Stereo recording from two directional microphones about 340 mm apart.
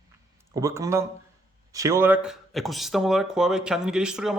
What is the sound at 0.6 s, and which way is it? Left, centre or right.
Speech, centre.